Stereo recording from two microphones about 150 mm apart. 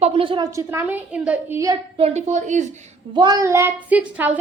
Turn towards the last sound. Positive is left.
turn(degrees=-10)  # may be behind; listen again after turning